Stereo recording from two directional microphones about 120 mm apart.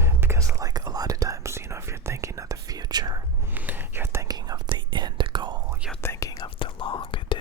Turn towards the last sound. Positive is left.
turn(degrees=45)  # may be behind; listen again after turning